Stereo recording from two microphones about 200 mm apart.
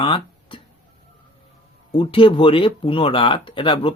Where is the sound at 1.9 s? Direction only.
25° left (ahead or behind).